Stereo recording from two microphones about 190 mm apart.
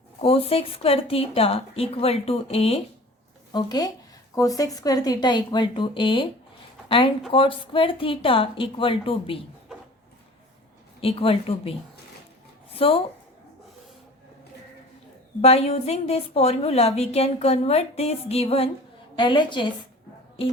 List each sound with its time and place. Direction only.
0.2 s a woman's voice: 30° left (ahead or behind)
3.5 s speech: 20° left (ahead or behind)
11.0 s a woman's voice: 30° left (ahead or behind)
12.7 s speech: 30° left (ahead or behind)
15.4 s a woman's voice: 35° left (ahead or behind)